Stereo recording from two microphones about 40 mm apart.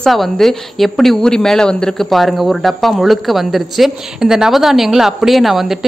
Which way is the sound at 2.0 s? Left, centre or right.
Centre.